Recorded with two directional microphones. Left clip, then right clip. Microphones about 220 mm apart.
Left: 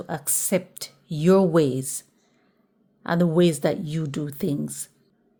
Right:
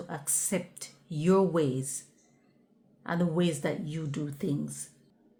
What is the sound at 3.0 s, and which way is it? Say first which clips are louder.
Speech: left 9 dB; 45° left (ahead or behind).